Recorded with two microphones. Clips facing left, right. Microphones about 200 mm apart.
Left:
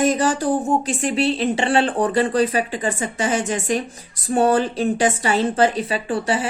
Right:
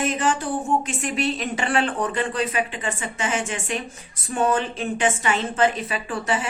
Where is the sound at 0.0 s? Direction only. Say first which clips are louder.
Left 5 dB; 40° left (ahead or behind).